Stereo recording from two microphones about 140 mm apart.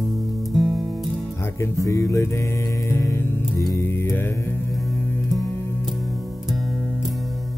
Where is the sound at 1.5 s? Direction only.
20° left (ahead or behind).